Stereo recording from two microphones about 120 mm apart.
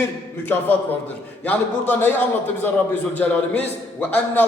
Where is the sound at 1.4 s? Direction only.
15° left (ahead or behind).